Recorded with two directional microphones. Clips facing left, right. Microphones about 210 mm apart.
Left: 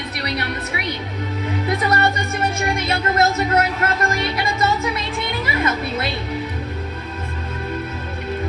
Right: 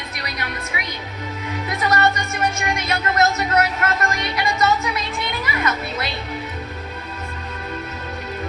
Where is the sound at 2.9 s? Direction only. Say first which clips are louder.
Even; 30° left (ahead or behind).